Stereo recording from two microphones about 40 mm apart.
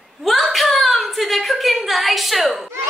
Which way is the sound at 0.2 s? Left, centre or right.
Centre.